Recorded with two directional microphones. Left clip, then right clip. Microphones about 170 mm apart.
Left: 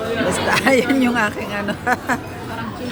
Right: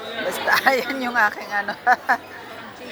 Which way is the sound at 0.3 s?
10° left (ahead or behind).